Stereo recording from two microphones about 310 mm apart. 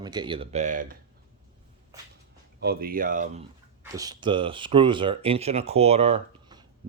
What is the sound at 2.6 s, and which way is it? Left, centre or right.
Speech, right.